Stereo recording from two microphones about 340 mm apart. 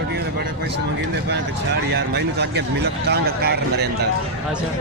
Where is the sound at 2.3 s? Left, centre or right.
Right.